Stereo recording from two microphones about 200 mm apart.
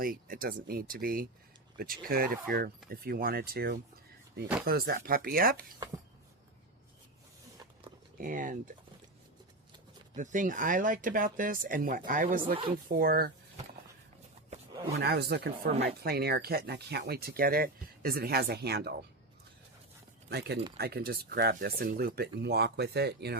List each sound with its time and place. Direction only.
0.0 s speech: 45° right (ahead or behind)
8.2 s speech: 40° right (ahead or behind)
10.2 s speech: 40° right (ahead or behind)
14.9 s speech: 55° right (ahead or behind)
20.7 s speech: 50° right (ahead or behind)